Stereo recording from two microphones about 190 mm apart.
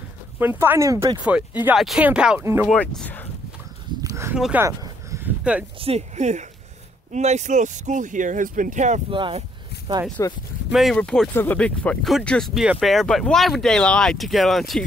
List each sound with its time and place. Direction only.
0.4 s speech: 10° right (ahead or behind)
2.7 s speech: 5° left (ahead or behind)
4.0 s a sound: 15° right (ahead or behind)
4.4 s speech: 5° right (ahead or behind)
4.6 s a sound: 15° right (ahead or behind)
5.8 s speech: 35° right (ahead or behind)
9.1 s speech: 25° right (ahead or behind)
10.2 s speech: 15° left (ahead or behind)
10.7 s speech: centre (ahead or behind)